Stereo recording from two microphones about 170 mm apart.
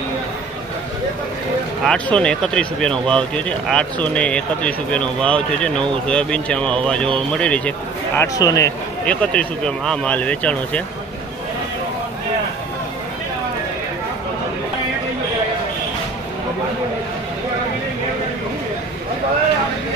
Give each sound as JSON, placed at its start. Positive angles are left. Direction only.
{"t": 1.9, "sound": "speech", "side_deg": 5}
{"t": 8.2, "sound": "speech", "side_deg": 20}
{"t": 9.0, "sound": "speech", "side_deg": 5}